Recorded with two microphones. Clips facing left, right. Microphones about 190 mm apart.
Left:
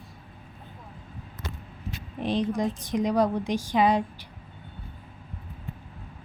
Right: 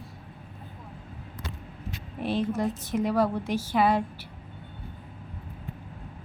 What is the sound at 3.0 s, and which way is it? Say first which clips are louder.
Speech: left 2 dB; 15° left (ahead or behind).